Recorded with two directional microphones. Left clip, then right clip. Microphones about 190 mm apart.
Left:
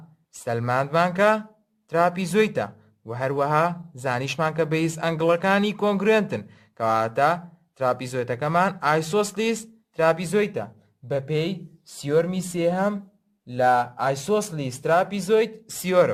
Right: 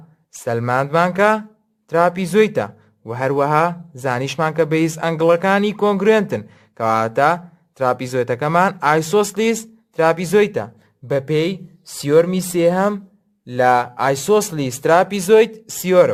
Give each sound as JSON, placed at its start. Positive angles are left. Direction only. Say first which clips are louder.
{"t": 0.3, "sound": "speech", "louder": "right 5 dB", "side_deg": -25}